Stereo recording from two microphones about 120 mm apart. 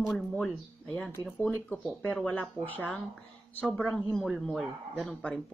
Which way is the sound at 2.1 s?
10° left (ahead or behind).